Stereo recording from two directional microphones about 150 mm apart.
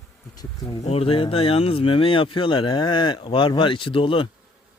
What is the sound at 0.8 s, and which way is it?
Speech, 40° left (ahead or behind).